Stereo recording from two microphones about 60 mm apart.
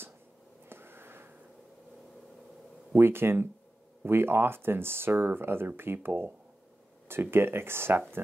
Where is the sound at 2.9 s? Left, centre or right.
Right.